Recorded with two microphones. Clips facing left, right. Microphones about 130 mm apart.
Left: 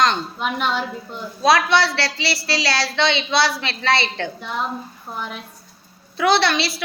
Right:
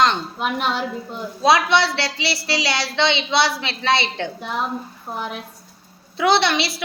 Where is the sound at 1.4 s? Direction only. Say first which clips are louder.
Even; 20° right (ahead or behind).